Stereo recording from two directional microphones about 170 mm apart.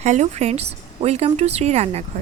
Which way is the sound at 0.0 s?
40° right (ahead or behind).